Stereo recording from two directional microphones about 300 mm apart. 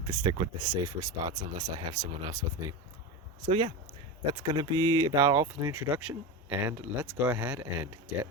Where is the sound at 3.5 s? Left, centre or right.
Centre.